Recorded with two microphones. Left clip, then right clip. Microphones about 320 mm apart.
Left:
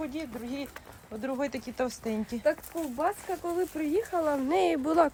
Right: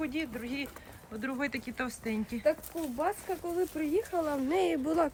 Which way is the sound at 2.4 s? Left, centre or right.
Left.